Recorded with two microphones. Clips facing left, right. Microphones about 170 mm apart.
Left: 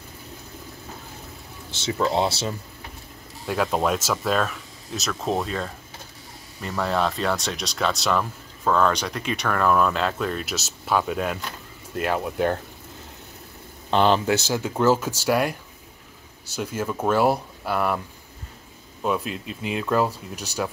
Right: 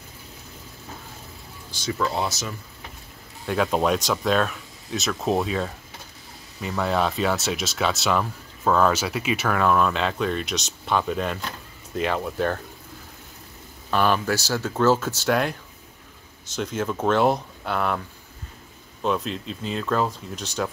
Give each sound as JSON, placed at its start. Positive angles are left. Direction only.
{"t": 1.7, "sound": "speech", "side_deg": 25}
{"t": 3.4, "sound": "speech", "side_deg": 0}
{"t": 13.8, "sound": "speech", "side_deg": 25}
{"t": 19.0, "sound": "speech", "side_deg": 5}